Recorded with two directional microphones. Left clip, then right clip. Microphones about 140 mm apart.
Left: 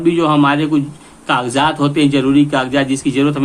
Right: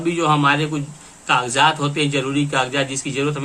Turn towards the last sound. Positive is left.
turn(degrees=50)  # may be behind; listen again after turning